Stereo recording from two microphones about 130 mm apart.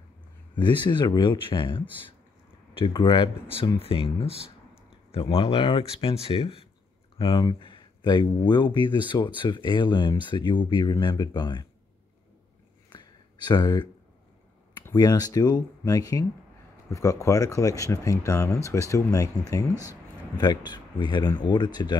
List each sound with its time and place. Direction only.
0.6 s speech: 35° left (ahead or behind)
12.9 s a sound: 35° left (ahead or behind)
15.0 s speech: 30° left (ahead or behind)